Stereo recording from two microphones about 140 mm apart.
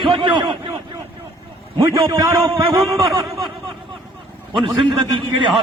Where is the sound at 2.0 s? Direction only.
35° right (ahead or behind).